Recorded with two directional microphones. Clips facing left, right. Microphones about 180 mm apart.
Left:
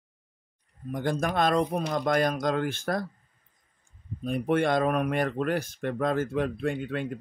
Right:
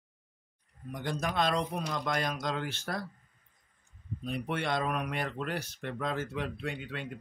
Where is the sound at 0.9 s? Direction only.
50° left (ahead or behind).